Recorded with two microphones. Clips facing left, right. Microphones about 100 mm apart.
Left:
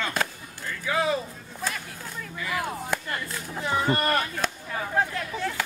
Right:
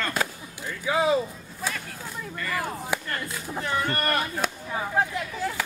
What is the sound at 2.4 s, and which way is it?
Speech, 5° left (ahead or behind).